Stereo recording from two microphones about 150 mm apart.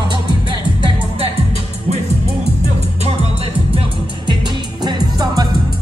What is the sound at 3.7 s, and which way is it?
Music, 30° right (ahead or behind).